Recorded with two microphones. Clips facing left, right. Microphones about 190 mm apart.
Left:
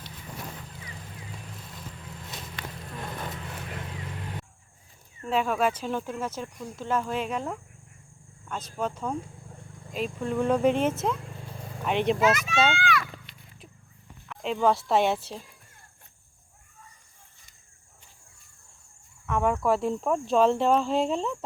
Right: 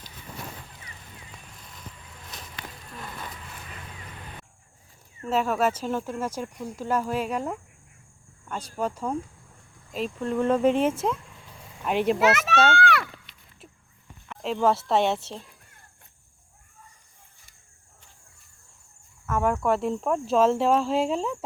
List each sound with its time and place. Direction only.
5.3 s speech: 5° right (ahead or behind)
11.3 s a sound: 45° left (ahead or behind)
11.9 s speech: 5° right (ahead or behind)
12.2 s a child's voice: 70° right (ahead or behind)
13.3 s a sound: centre (ahead or behind)
14.3 s speech: centre (ahead or behind)
19.2 s speech: centre (ahead or behind)